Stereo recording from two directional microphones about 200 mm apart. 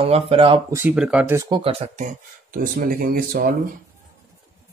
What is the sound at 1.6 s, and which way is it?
Speech, 30° right (ahead or behind).